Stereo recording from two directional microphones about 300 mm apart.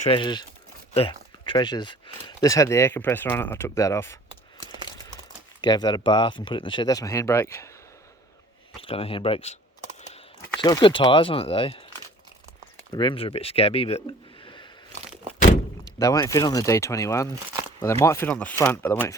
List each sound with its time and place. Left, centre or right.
0.1 s speech: centre
5.6 s speech: centre
8.7 s speech: centre
10.6 s speech: centre
12.9 s speech: centre
14.4 s a sound: centre
16.0 s speech: centre